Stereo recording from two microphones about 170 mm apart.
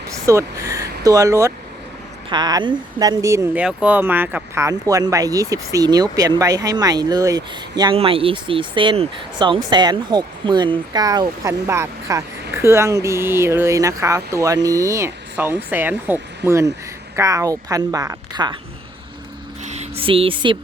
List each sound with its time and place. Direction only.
0.3 s speech: 20° right (ahead or behind)
19.6 s speech: 40° right (ahead or behind)